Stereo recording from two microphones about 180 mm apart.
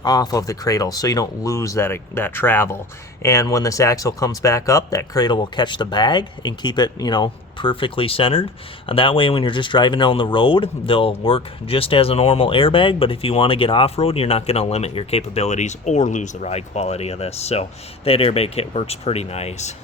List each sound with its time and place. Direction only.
0.0 s speech: 20° left (ahead or behind); by 19.7 s 35° left (ahead or behind)